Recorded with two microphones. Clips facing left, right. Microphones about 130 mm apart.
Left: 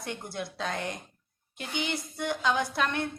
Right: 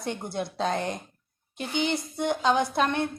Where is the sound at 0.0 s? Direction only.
25° right (ahead or behind).